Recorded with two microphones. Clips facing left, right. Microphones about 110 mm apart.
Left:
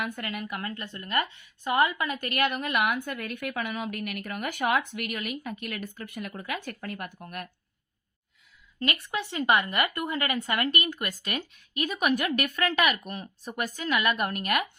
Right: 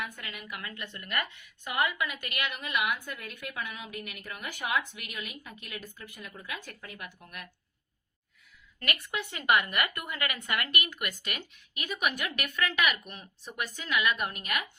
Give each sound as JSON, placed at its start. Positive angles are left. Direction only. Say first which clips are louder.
{"t": 0.0, "sound": "a woman's voice", "louder": "left 7 dB", "side_deg": 55}
{"t": 8.8, "sound": "speech", "louder": "left 4 dB", "side_deg": 25}